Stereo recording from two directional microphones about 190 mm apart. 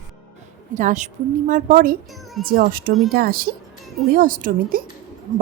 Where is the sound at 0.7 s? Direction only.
40° right (ahead or behind).